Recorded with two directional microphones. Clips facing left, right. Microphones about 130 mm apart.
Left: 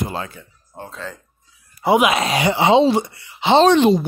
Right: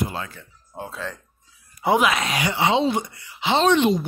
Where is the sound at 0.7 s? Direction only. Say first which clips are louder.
Even; 5° right (ahead or behind).